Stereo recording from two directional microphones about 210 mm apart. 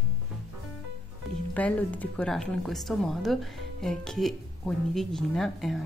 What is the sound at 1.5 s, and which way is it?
Speech, 5° left (ahead or behind).